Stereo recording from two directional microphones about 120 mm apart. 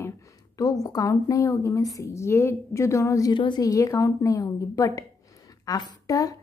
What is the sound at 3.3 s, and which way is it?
A woman's voice, 40° left (ahead or behind).